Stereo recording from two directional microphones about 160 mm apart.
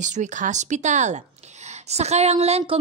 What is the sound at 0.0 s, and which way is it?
A woman's voice, 50° right (ahead or behind).